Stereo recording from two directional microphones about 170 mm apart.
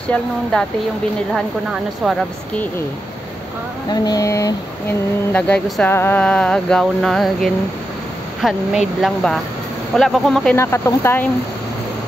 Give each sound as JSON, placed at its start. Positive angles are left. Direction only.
{"t": 0.1, "sound": "speech", "side_deg": 5}
{"t": 3.9, "sound": "speech", "side_deg": 20}
{"t": 5.3, "sound": "speech", "side_deg": 10}
{"t": 10.5, "sound": "speech", "side_deg": 15}